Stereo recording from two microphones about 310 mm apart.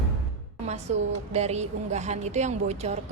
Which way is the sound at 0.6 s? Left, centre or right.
Right.